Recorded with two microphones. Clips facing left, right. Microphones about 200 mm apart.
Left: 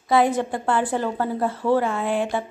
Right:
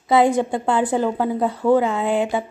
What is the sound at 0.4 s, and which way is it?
A woman's voice, 20° right (ahead or behind).